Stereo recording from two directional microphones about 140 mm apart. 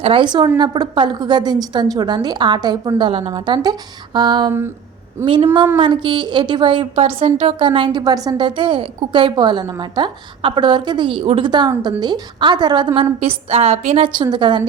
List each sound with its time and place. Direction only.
0.0 s a woman's voice: 35° right (ahead or behind)
5.7 s a woman's voice: 35° right (ahead or behind)
14.2 s a woman's voice: 35° right (ahead or behind)